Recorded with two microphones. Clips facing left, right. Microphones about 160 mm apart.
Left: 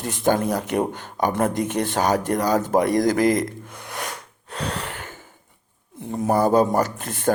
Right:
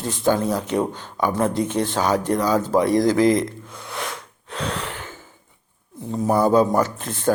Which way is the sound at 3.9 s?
45° left (ahead or behind).